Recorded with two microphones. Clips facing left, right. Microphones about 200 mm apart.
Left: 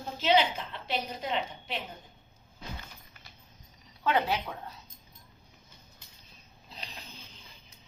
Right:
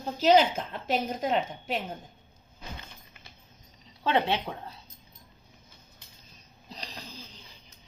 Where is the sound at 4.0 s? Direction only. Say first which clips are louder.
Right 2 dB; 30° right (ahead or behind).